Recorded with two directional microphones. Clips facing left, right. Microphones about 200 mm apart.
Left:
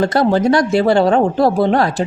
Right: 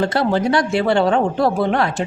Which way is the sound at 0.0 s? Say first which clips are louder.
Left 4 dB; 40° left (ahead or behind).